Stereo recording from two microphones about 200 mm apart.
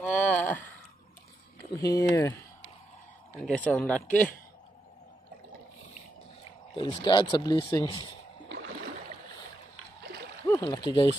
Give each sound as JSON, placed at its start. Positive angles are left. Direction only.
{"t": 0.0, "sound": "a sound", "side_deg": 5}
{"t": 1.8, "sound": "speech", "side_deg": 15}
{"t": 3.4, "sound": "speech", "side_deg": 5}
{"t": 6.7, "sound": "speech", "side_deg": 25}
{"t": 10.5, "sound": "speech", "side_deg": 20}